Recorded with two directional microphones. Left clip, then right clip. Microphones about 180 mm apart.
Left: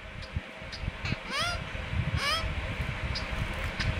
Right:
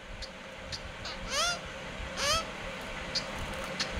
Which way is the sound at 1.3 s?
15° right (ahead or behind).